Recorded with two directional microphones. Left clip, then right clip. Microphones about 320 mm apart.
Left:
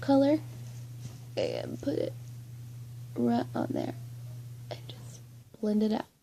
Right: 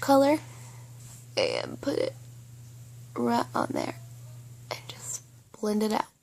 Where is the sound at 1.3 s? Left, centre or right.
Right.